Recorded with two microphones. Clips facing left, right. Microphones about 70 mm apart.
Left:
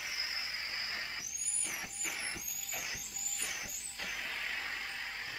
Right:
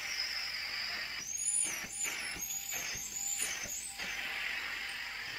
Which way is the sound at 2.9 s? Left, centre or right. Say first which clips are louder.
Even; centre.